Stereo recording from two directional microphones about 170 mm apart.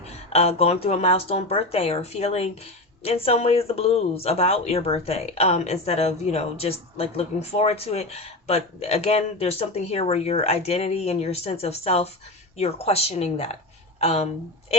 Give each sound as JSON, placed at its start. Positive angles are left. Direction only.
{"t": 0.1, "sound": "speech", "side_deg": 40}